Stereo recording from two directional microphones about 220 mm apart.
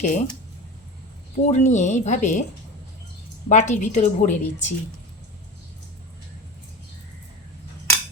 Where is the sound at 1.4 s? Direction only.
30° left (ahead or behind).